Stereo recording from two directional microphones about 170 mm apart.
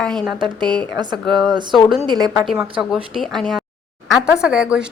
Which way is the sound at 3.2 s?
Centre (ahead or behind).